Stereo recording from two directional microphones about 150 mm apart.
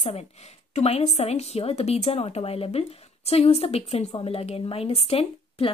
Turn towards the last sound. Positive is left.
turn(degrees=40)  # may be behind; listen again after turning